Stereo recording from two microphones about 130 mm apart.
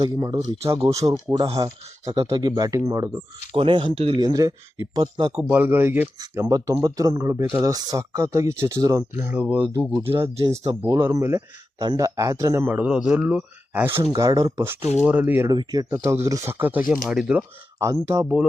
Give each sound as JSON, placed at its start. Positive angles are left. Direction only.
{"t": 0.0, "sound": "speech", "side_deg": -35}
{"t": 3.5, "sound": "speech", "side_deg": -40}
{"t": 4.2, "sound": "speech", "side_deg": -30}
{"t": 5.4, "sound": "speech", "side_deg": -15}
{"t": 6.3, "sound": "speech", "side_deg": -25}
{"t": 10.5, "sound": "speech", "side_deg": -30}
{"t": 13.9, "sound": "speech", "side_deg": -25}
{"t": 14.6, "sound": "speech", "side_deg": -20}
{"t": 15.5, "sound": "speech", "side_deg": -30}
{"t": 17.7, "sound": "speech", "side_deg": -25}